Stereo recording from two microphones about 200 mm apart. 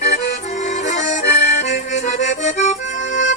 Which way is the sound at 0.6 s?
35° left (ahead or behind).